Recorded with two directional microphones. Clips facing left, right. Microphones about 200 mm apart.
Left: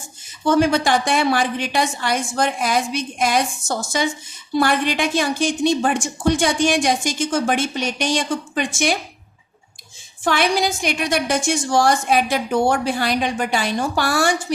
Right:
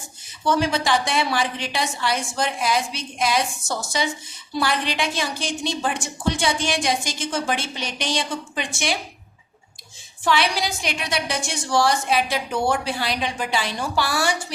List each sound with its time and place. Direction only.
0.4 s a woman's voice: 50° left (ahead or behind)
10.2 s a woman's voice: 50° left (ahead or behind)